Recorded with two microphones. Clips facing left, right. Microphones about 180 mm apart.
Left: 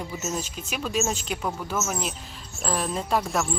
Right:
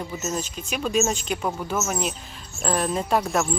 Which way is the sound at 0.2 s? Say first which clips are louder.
Right 2 dB; 5° left (ahead or behind).